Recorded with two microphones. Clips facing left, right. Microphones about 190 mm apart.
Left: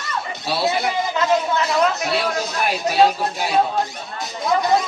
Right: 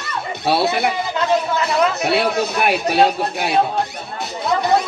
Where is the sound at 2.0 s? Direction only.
65° right (ahead or behind).